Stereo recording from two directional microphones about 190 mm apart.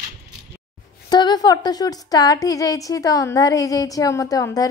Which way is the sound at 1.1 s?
20° left (ahead or behind).